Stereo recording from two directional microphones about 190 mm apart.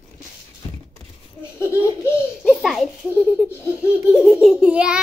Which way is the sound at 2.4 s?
Centre (ahead or behind).